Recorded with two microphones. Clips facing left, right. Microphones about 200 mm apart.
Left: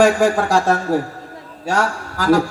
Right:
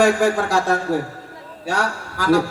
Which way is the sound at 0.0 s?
45° left (ahead or behind).